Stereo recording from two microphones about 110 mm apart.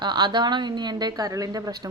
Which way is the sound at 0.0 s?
40° right (ahead or behind).